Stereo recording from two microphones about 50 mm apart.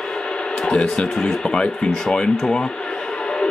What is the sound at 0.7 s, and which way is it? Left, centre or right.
Speech, centre.